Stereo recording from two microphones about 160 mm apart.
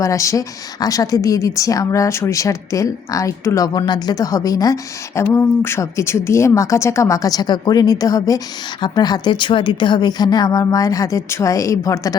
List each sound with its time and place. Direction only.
0.0 s a woman's voice: 20° left (ahead or behind)